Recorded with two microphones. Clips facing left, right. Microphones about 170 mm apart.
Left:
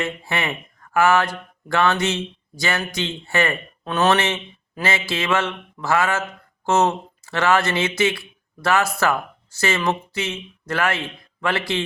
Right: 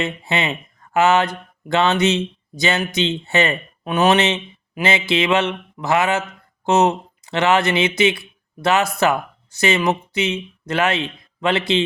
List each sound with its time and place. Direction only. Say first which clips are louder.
0.0 s speech: right 3 dB; 20° right (ahead or behind)